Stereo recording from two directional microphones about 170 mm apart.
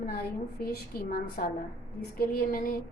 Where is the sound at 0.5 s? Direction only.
65° left (ahead or behind).